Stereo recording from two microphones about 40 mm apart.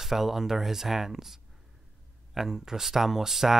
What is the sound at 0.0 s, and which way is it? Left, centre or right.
Speech, centre.